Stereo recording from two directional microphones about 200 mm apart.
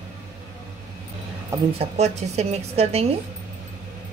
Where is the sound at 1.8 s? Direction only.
30° right (ahead or behind).